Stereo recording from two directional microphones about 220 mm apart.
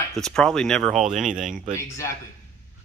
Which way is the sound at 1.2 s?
35° right (ahead or behind).